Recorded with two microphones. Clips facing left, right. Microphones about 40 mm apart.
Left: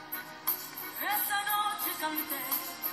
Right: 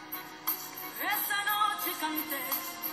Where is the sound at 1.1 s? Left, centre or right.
Right.